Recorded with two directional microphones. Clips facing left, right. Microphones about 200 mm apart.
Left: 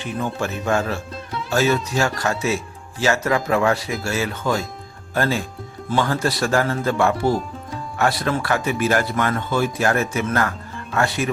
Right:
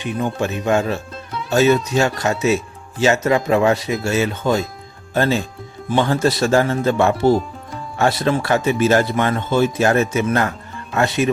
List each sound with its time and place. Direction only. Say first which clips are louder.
0.0 s speech: right 3 dB; 20° right (ahead or behind)
1.1 s music: even; centre (ahead or behind)
1.5 s speech: right 5 dB; 20° right (ahead or behind)